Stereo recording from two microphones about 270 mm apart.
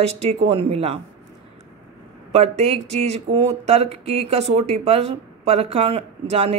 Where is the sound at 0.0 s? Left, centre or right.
Right.